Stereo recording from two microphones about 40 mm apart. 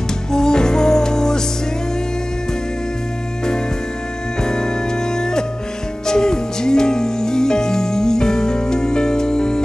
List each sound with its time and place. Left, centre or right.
0.3 s music: centre
4.4 s organ: centre
5.1 s music: centre